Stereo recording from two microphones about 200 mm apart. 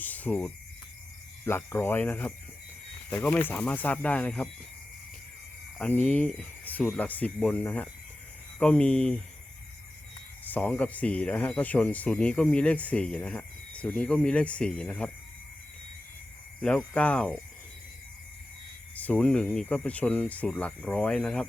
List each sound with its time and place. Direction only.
0.0 s speech: 10° left (ahead or behind)
5.8 s speech: 10° left (ahead or behind)
8.5 s cricket: 5° left (ahead or behind)
10.4 s speech: 10° left (ahead or behind)
16.6 s cricket: 5° left (ahead or behind)
18.9 s speech: 5° left (ahead or behind)